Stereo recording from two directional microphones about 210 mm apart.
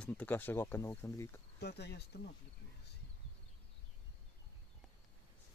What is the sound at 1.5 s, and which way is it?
Speech, 50° left (ahead or behind).